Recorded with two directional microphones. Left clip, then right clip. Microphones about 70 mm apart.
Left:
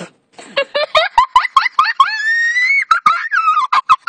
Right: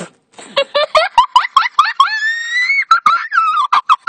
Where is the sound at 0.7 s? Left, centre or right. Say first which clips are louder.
Right 1 dB; left.